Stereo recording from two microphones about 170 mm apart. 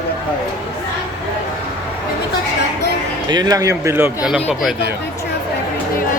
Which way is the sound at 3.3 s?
25° right (ahead or behind).